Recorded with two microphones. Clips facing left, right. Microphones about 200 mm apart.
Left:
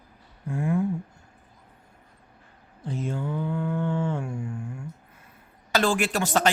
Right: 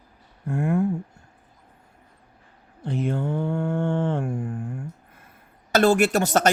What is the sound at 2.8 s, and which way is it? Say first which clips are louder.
Mantra: right 5 dB; 65° right (ahead or behind).